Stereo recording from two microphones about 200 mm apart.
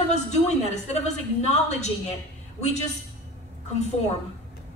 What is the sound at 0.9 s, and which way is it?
Speech, 35° left (ahead or behind).